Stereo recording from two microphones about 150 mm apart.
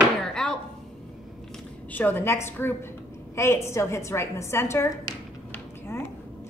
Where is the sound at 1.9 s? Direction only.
15° left (ahead or behind).